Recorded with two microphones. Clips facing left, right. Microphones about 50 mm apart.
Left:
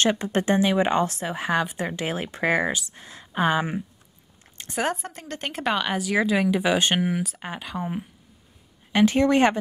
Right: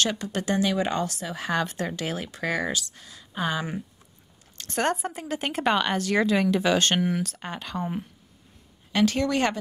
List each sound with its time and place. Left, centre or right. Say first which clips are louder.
0.0 s speech: left 4 dB; left
4.7 s a woman's voice: right 1 dB; centre
8.9 s speech: left 4 dB; left